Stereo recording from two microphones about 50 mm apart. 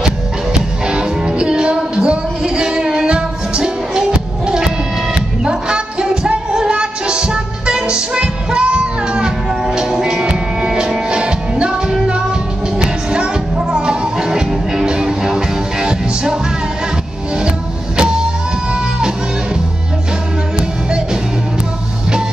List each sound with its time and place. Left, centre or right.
0.8 s music: centre
5.4 s music: centre